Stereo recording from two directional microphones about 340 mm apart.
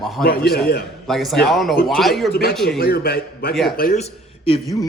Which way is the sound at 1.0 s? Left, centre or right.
Centre.